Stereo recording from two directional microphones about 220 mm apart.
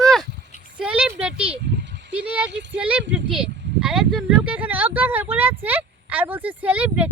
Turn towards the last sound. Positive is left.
turn(degrees=-5)  # may be behind; listen again after turning